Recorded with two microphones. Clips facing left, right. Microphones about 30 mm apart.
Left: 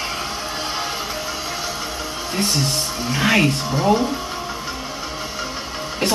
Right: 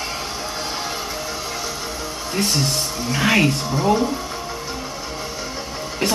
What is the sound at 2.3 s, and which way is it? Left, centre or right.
Speech, centre.